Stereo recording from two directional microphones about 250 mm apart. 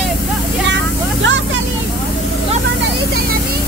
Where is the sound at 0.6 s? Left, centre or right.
Right.